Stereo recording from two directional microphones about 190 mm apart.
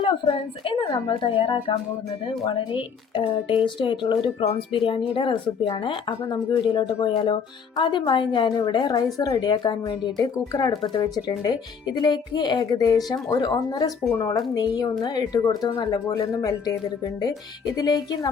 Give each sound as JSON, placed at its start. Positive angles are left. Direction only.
{"t": 0.0, "sound": "speech", "side_deg": 30}
{"t": 17.7, "sound": "speech", "side_deg": 20}